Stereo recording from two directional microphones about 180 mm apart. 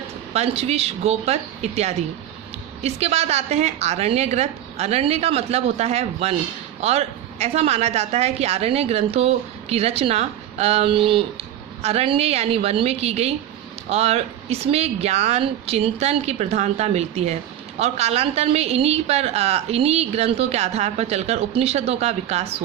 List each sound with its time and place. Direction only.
0.3 s a woman's voice: 35° right (ahead or behind)